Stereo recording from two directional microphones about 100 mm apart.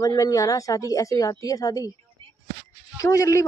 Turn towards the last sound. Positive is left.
turn(degrees=35)  # may be behind; listen again after turning